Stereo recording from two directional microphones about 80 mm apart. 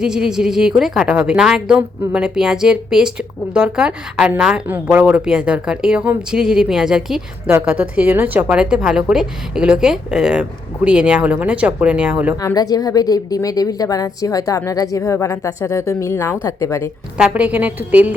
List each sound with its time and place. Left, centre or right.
0.0 s a woman's voice: centre
12.5 s speech: left
17.2 s a woman's voice: centre